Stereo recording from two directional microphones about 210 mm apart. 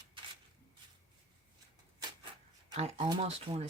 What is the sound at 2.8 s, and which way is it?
Speech, 25° right (ahead or behind).